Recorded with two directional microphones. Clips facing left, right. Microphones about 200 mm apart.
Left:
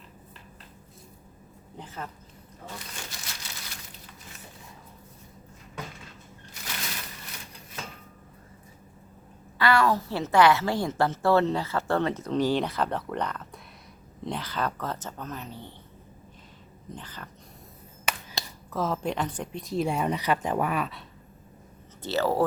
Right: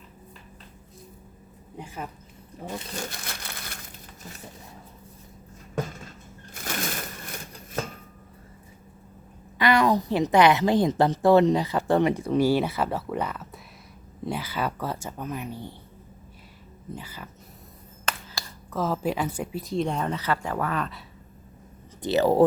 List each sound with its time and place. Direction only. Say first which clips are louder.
1.8 s a woman's voice: right 2 dB; 10° right (ahead or behind)
2.9 s crumpling: right 7 dB; 50° right (ahead or behind)
5.7 s crushing: right 9 dB; 45° right (ahead or behind)
9.6 s a woman's voice: right 2 dB; 20° right (ahead or behind)
16.9 s a woman's voice: right 3 dB; 10° right (ahead or behind)
18.0 s finger snapping: even; 15° left (ahead or behind)
18.7 s speech: right 2 dB; centre (ahead or behind)
22.0 s a woman's voice: right 6 dB; 15° right (ahead or behind)